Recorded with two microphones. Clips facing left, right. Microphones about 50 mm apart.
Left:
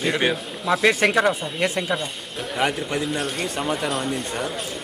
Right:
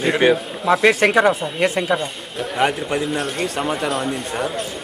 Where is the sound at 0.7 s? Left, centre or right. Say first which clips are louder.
Right 4 dB; centre.